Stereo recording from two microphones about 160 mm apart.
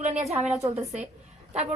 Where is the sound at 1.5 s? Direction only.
40° right (ahead or behind).